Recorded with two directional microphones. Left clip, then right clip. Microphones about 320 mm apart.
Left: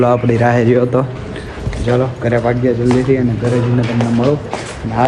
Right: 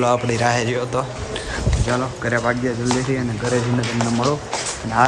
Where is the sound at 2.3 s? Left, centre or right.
Centre.